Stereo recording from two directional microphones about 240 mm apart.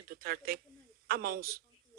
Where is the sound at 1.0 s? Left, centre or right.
Right.